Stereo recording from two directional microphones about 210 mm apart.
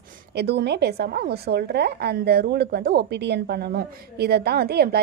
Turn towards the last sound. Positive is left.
turn(degrees=-50)  # may be behind; listen again after turning